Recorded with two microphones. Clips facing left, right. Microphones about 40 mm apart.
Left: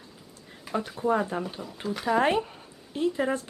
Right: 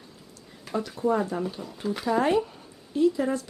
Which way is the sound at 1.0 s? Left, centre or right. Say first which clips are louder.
Right 1 dB; left.